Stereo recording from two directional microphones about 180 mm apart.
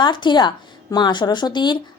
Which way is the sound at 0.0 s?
25° left (ahead or behind).